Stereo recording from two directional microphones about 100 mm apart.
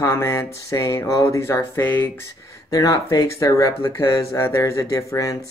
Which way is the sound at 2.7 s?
35° left (ahead or behind).